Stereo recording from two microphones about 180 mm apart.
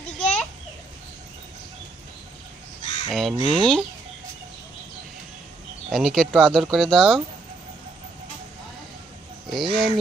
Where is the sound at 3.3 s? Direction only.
25° right (ahead or behind).